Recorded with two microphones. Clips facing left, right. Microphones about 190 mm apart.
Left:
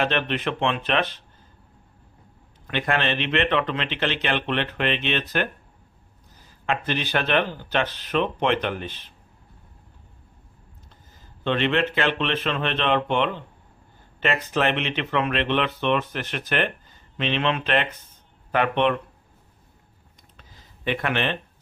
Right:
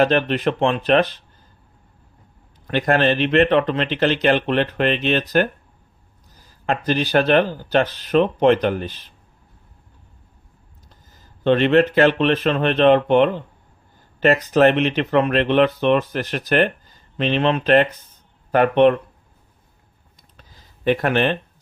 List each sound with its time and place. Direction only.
0.0 s speech: 40° right (ahead or behind)
2.6 s speech: 40° right (ahead or behind)
6.6 s speech: 40° right (ahead or behind)
11.4 s speech: 40° right (ahead or behind)
20.3 s a sound: 40° right (ahead or behind)